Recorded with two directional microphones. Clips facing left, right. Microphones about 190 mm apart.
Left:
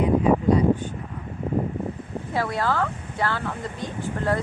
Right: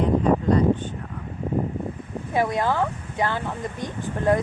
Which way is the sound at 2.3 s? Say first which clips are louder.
Right 2 dB; 20° right (ahead or behind).